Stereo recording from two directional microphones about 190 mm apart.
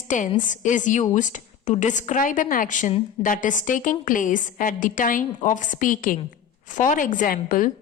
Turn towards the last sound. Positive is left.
turn(degrees=50)  # may be behind; listen again after turning